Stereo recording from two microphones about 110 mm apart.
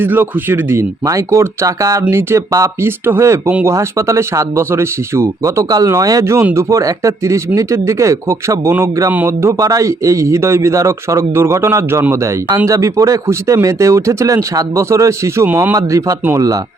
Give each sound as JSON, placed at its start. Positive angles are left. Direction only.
{"t": 0.0, "sound": "speech", "side_deg": -20}
{"t": 15.4, "sound": "speech", "side_deg": -15}
{"t": 15.7, "sound": "speech", "side_deg": -30}